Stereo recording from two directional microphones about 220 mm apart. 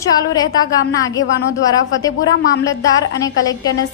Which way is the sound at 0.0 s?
15° left (ahead or behind).